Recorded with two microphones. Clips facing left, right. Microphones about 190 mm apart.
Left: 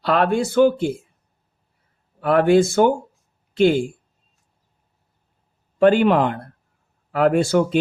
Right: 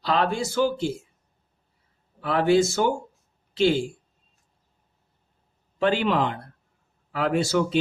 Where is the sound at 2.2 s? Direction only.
55° left (ahead or behind).